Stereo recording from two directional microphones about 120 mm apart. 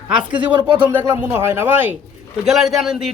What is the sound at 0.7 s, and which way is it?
Speech, 15° right (ahead or behind).